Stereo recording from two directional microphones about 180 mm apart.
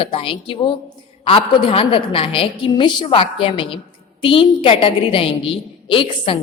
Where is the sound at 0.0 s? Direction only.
30° left (ahead or behind).